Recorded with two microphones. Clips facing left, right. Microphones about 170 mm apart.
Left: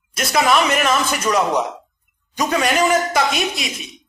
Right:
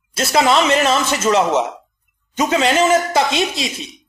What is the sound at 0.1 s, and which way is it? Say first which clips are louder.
Speech: right 2 dB; 25° right (ahead or behind).